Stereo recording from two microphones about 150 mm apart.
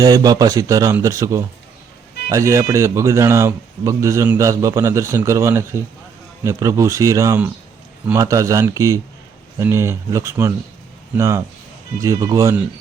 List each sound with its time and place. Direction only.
0.0 s speech: 25° right (ahead or behind)